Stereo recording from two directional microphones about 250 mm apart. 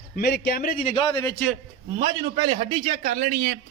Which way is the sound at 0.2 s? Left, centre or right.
Left.